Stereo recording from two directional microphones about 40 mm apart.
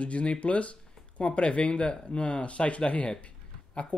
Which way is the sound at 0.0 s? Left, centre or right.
Left.